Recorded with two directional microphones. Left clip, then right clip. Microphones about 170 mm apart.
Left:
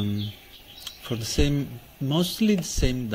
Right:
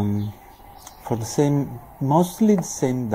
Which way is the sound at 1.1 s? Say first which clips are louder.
Right 5 dB; 90° left.